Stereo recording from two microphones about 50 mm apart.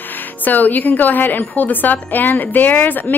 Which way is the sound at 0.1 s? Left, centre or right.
Left.